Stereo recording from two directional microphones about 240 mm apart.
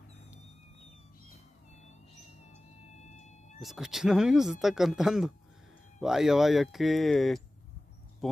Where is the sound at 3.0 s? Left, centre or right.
Left.